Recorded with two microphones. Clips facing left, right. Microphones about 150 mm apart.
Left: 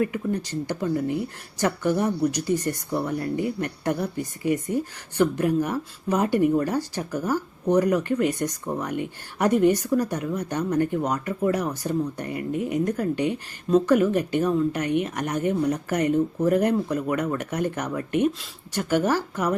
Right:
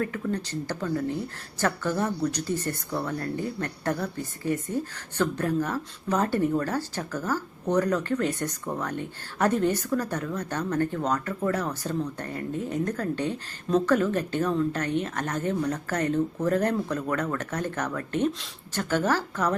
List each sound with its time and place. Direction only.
0.0 s a woman's voice: 10° left (ahead or behind)